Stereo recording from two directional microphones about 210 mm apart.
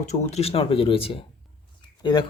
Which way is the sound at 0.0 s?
35° left (ahead or behind).